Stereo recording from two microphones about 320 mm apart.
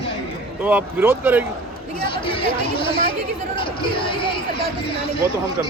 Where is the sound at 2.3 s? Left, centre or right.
Centre.